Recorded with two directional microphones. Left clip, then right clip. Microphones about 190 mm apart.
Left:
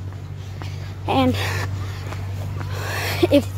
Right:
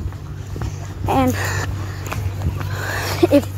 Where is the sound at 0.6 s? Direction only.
10° left (ahead or behind).